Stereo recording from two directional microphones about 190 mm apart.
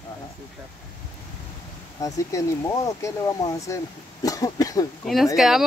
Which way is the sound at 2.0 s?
15° left (ahead or behind).